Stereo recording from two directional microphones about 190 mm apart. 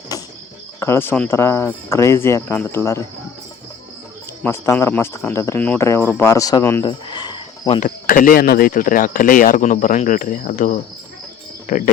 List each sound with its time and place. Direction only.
0.1 s cricket: 20° left (ahead or behind)
0.8 s speech: 15° left (ahead or behind)
4.4 s speech: 15° left (ahead or behind)
6.8 s cricket: 25° left (ahead or behind)
7.8 s speech: 45° left (ahead or behind)